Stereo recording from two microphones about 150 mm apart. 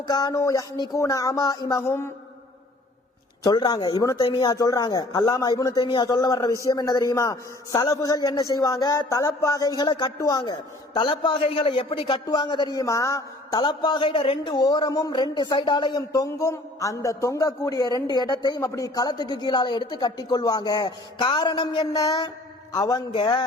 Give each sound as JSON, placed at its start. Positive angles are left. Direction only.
{"t": 0.1, "sound": "a man's voice", "side_deg": 25}
{"t": 3.4, "sound": "a man's voice", "side_deg": 30}